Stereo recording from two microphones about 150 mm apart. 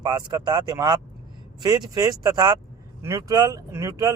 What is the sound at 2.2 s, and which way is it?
Speech, 30° right (ahead or behind).